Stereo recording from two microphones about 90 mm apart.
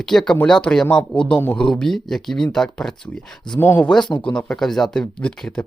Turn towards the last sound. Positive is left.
turn(degrees=10)  # may be behind; listen again after turning